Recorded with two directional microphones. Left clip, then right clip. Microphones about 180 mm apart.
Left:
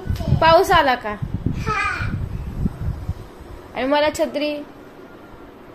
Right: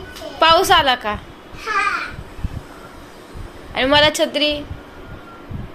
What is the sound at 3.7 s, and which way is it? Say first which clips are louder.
Speech: right 5 dB; 5° left (ahead or behind).